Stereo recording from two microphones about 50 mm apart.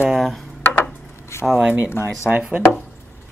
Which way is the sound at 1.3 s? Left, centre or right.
Left.